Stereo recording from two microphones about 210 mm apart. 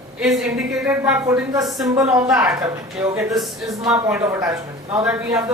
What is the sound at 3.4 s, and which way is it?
A man's voice, centre (ahead or behind).